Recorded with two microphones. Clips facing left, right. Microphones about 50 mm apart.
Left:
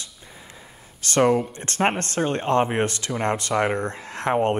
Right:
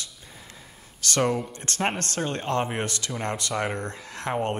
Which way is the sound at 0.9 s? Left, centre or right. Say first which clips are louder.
Left 6 dB; left.